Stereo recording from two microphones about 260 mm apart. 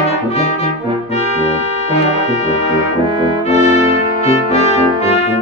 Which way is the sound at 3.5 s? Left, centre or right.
Left.